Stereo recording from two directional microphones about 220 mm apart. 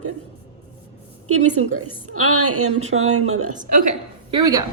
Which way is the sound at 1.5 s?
85° right.